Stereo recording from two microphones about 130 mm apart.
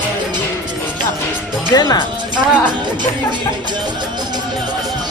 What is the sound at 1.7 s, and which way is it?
Speech, 30° left (ahead or behind).